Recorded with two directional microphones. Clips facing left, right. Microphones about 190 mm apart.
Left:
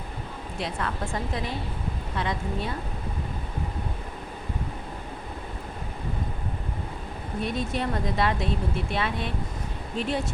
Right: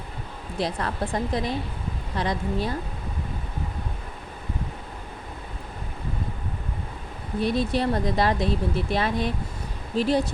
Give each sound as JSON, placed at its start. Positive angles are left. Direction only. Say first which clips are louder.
{"t": 0.6, "sound": "speech", "louder": "right 4 dB", "side_deg": -35}
{"t": 7.4, "sound": "speech", "louder": "right 5 dB", "side_deg": -35}